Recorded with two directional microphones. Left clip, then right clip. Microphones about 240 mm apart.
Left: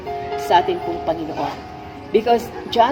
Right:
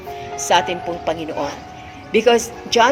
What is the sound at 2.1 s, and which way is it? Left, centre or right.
Speech, centre.